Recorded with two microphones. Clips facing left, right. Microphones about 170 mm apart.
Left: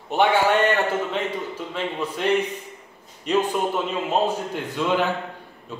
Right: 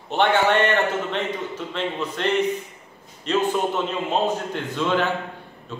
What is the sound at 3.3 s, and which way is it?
A man's voice, 10° left (ahead or behind).